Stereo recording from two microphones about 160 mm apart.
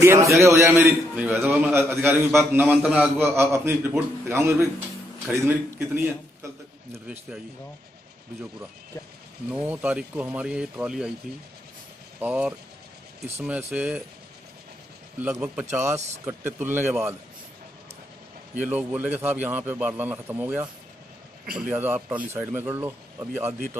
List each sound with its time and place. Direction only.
0.0 s a man's voice: 15° right (ahead or behind)
6.9 s a man's voice: 5° right (ahead or behind)
9.5 s a man's voice: 10° right (ahead or behind)
12.2 s a man's voice: 10° right (ahead or behind)
15.1 s a man's voice: 10° right (ahead or behind)
18.6 s a man's voice: 10° right (ahead or behind)